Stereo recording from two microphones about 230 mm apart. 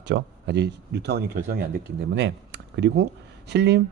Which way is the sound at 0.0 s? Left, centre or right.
Right.